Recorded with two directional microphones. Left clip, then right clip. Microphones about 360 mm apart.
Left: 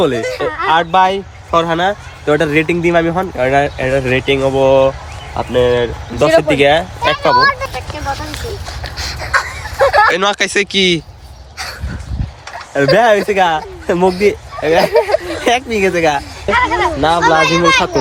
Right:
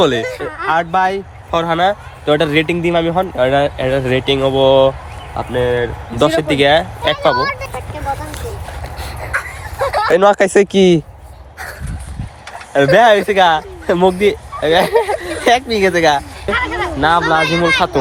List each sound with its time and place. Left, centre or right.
0.0 s speech: centre
0.3 s speech: left
0.7 s speech: centre
9.0 s a sound: centre
10.1 s speech: centre
12.7 s speech: centre
15.4 s a sound: centre
15.8 s speech: centre
16.5 s a sound: centre
17.2 s speech: centre